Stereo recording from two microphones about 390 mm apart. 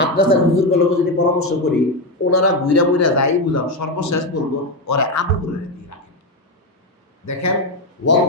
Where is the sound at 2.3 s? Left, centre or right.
Left.